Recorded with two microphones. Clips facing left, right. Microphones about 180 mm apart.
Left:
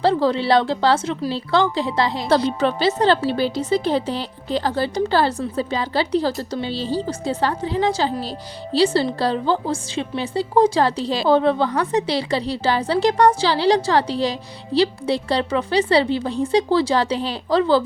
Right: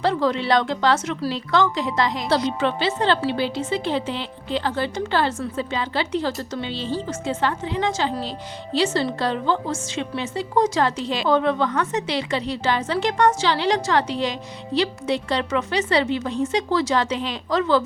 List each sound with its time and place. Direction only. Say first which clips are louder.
0.0 s a woman's voice: left 3 dB; 30° left (ahead or behind)